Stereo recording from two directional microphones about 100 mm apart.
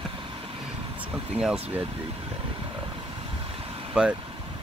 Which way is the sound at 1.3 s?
10° right (ahead or behind).